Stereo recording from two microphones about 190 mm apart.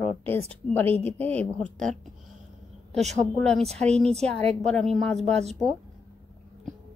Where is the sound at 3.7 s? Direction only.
35° right (ahead or behind).